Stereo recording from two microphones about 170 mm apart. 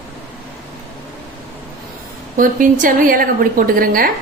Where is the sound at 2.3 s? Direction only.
50° right (ahead or behind).